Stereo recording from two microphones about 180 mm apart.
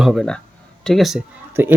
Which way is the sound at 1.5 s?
10° right (ahead or behind).